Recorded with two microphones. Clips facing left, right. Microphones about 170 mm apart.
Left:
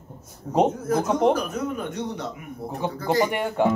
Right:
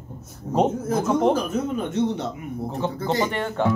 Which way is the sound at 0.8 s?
25° right (ahead or behind).